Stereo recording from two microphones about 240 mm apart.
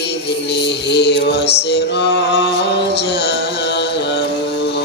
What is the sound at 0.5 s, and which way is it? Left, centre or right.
Mantra, left.